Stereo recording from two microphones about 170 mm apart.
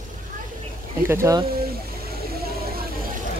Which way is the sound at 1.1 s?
15° right (ahead or behind).